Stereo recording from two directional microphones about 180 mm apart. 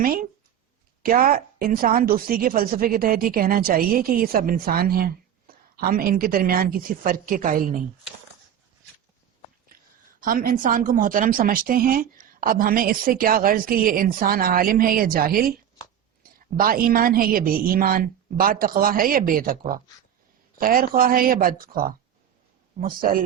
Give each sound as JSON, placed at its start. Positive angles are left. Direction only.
{"t": 0.0, "sound": "speech", "side_deg": -55}
{"t": 10.2, "sound": "speech", "side_deg": -50}
{"t": 16.6, "sound": "speech", "side_deg": -55}